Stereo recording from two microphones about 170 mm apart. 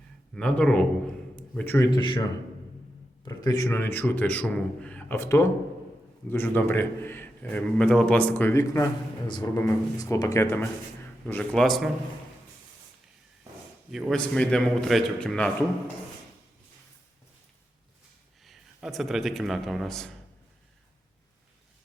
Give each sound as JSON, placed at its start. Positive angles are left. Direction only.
{"t": 0.3, "sound": "a man's voice", "side_deg": 5}
{"t": 1.9, "sound": "a man's voice", "side_deg": 25}
{"t": 3.2, "sound": "a man's voice", "side_deg": 20}
{"t": 13.9, "sound": "a man's voice", "side_deg": 0}
{"t": 18.4, "sound": "a man's voice", "side_deg": 0}